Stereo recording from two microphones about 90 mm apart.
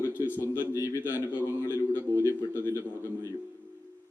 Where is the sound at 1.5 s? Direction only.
25° left (ahead or behind).